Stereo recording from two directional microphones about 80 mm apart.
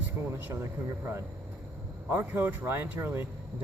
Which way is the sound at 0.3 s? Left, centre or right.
Right.